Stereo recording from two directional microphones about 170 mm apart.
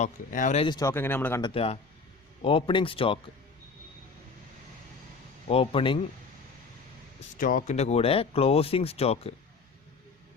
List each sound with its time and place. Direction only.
0.0 s speech: 50° left (ahead or behind)
0.6 s speech: 25° left (ahead or behind)
1.4 s speech: 30° left (ahead or behind)
5.5 s speech: 35° left (ahead or behind)
7.3 s speech: 50° left (ahead or behind); by 9.3 s 35° left (ahead or behind)